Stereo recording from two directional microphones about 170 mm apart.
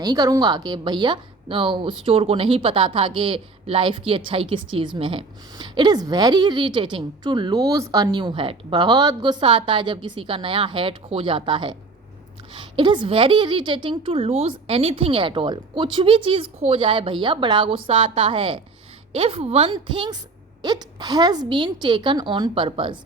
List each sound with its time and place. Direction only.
0.0 s a woman's voice: 20° right (ahead or behind)